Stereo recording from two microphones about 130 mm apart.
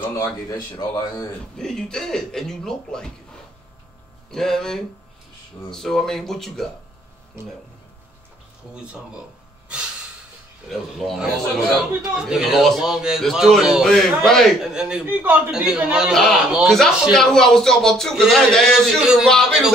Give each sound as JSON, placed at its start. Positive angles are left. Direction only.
{"t": 0.0, "sound": "a sound", "side_deg": 25}
{"t": 0.7, "sound": "a man's voice", "side_deg": 30}
{"t": 1.6, "sound": "a man's voice", "side_deg": 5}
{"t": 4.3, "sound": "a man's voice", "side_deg": 5}
{"t": 8.7, "sound": "speech", "side_deg": -5}
{"t": 10.7, "sound": "a man's voice", "side_deg": 0}